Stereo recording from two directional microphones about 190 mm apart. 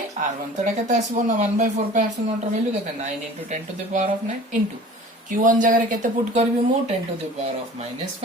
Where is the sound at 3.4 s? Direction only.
40° right (ahead or behind).